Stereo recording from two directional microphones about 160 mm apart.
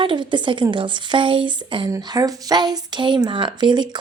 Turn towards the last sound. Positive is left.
turn(degrees=-30)  # may be behind; listen again after turning